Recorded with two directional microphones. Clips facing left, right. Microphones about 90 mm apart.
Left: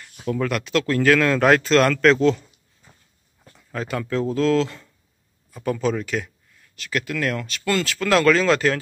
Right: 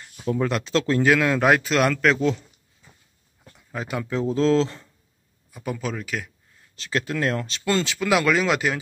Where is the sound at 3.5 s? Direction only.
15° right (ahead or behind).